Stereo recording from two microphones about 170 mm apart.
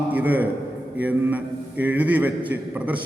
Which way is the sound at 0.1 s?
10° right (ahead or behind).